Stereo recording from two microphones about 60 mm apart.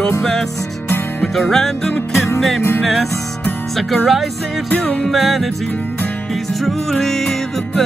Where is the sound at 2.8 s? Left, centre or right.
Centre.